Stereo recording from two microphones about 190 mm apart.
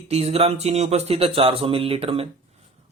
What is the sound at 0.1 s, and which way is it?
A man's voice, 30° right (ahead or behind).